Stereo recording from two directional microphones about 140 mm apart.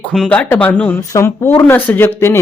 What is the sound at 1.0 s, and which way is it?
Speech, 20° left (ahead or behind).